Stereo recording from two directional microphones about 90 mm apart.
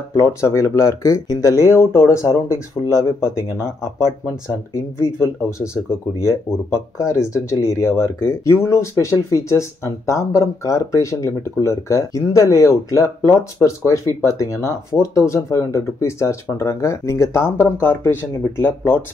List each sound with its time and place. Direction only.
0.2 s speech: 30° left (ahead or behind)